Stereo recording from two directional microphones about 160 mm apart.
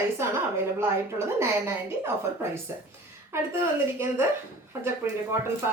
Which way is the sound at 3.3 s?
15° right (ahead or behind).